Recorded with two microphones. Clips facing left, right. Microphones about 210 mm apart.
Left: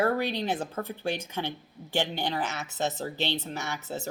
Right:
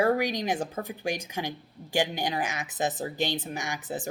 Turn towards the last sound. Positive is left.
turn(degrees=-15)  # may be behind; listen again after turning